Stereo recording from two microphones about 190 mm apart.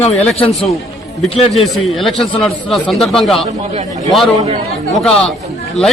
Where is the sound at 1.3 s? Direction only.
30° left (ahead or behind).